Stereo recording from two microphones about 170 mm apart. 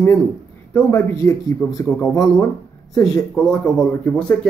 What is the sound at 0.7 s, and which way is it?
Speech, 15° left (ahead or behind).